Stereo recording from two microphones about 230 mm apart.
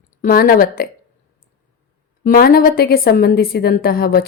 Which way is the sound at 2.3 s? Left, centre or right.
Left.